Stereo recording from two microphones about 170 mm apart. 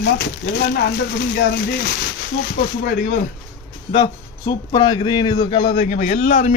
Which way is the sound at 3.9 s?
25° left (ahead or behind).